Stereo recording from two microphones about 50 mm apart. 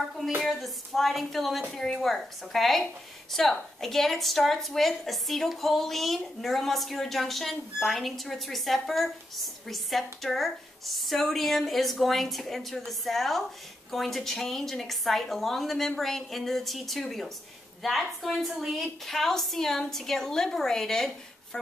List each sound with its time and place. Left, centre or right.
0.5 s a woman's voice: centre